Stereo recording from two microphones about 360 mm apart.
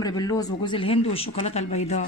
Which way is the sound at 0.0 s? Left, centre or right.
Centre.